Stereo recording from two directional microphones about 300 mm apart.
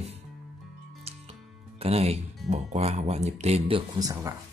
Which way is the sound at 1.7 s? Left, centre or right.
Centre.